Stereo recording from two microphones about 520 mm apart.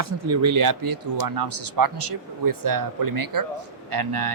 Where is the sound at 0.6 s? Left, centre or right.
Right.